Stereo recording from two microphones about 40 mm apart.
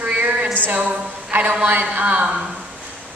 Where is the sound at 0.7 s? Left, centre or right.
Right.